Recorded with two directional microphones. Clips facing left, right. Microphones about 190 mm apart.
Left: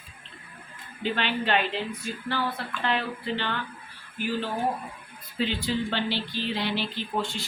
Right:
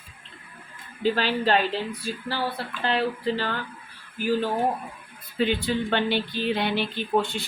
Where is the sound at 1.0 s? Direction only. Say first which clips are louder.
Right 5 dB; 40° right (ahead or behind).